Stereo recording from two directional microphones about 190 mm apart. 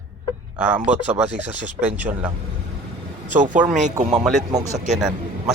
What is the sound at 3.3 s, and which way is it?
Speech, 45° right (ahead or behind).